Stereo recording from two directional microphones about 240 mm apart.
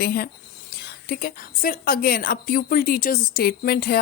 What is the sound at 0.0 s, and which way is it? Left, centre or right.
A woman's voice, left.